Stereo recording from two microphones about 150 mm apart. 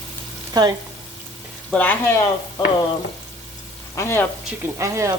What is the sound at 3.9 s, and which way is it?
Speech, 15° left (ahead or behind).